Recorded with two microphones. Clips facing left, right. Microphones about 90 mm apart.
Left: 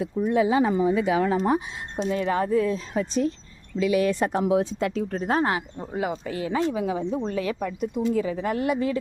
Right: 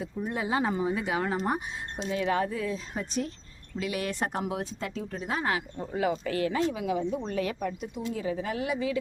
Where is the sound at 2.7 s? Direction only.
90° left.